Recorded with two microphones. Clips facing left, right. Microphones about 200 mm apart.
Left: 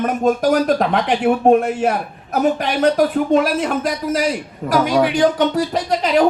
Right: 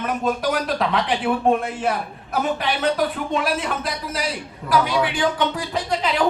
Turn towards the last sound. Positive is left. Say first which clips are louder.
# left 6 dB
turn(degrees=40)  # may be behind; listen again after turning